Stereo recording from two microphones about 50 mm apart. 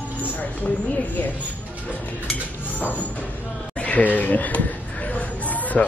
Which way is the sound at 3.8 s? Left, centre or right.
Left.